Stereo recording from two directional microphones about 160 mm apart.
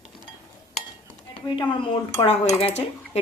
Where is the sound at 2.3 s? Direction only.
40° left (ahead or behind).